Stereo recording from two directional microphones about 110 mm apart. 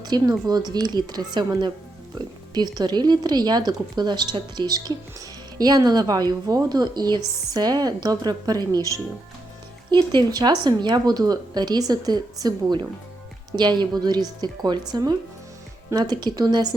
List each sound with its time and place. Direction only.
0.0 s speech: 35° right (ahead or behind)
9.9 s speech: 45° right (ahead or behind)